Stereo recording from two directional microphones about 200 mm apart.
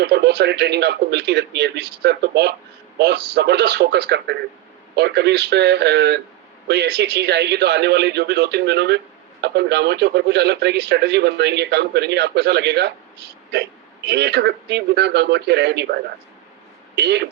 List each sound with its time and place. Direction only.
0.0 s speech: 55° right (ahead or behind)